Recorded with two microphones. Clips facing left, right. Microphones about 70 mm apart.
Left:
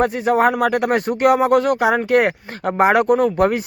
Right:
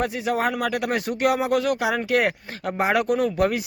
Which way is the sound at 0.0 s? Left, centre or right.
Left.